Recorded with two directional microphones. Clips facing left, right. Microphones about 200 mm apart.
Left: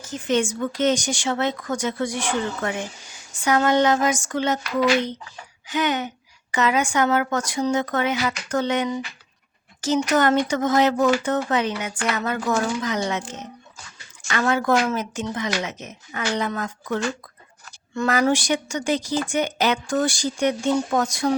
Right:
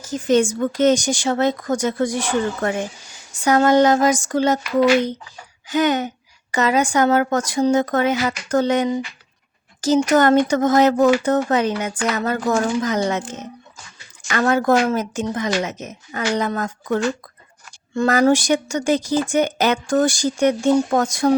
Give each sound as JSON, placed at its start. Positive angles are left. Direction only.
{"t": 0.0, "sound": "a woman's voice", "side_deg": -40}
{"t": 5.6, "sound": "a woman's voice", "side_deg": -40}
{"t": 14.3, "sound": "speech", "side_deg": -45}